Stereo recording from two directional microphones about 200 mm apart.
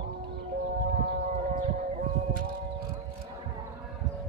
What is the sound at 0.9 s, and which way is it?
Civil defense siren, 40° right (ahead or behind).